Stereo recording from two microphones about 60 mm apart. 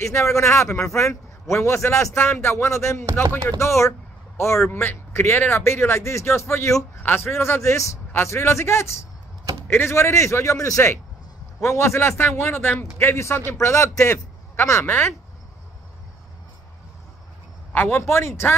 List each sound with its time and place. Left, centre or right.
0.0 s a man's voice: left
4.6 s a man's voice: left
7.0 s a man's voice: left
7.7 s a man's voice: left
17.7 s a man's voice: left